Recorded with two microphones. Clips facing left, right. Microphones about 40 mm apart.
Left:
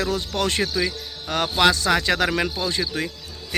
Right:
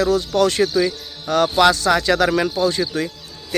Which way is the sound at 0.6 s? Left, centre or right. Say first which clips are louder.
Right 6 dB; centre.